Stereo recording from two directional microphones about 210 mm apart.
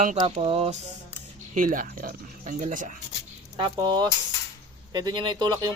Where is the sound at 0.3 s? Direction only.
30° right (ahead or behind).